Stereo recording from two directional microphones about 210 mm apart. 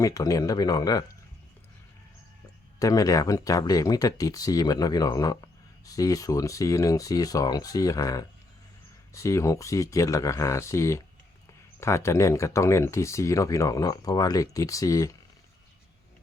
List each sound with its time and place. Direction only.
0.0 s speech: 15° left (ahead or behind)
2.7 s speech: 15° left (ahead or behind)